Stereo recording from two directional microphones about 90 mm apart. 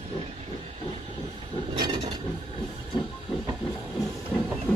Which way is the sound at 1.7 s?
55° right (ahead or behind).